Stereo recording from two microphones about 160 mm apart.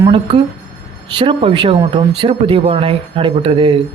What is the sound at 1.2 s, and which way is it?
Speech, 35° right (ahead or behind).